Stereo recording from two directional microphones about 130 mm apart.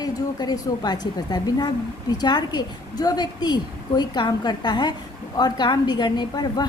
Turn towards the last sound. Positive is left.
turn(degrees=30)  # may be behind; listen again after turning